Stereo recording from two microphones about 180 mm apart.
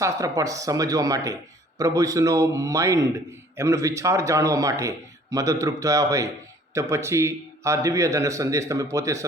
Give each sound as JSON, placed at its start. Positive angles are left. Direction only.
{"t": 0.0, "sound": "a man's voice", "side_deg": -20}